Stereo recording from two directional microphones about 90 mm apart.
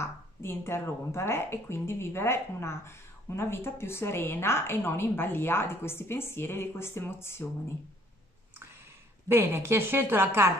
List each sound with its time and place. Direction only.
0.0 s a woman's voice: 30° left (ahead or behind)
9.3 s a woman's voice: 25° right (ahead or behind)